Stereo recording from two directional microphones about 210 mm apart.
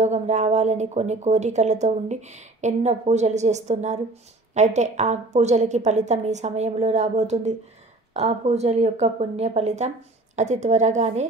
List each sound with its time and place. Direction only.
0.0 s speech: 35° right (ahead or behind)